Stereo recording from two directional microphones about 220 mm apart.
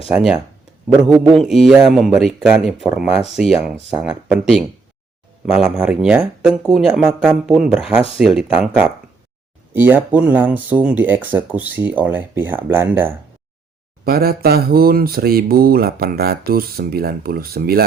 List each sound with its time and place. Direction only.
0.1 s speech: 5° right (ahead or behind)
14.0 s speech: 45° right (ahead or behind)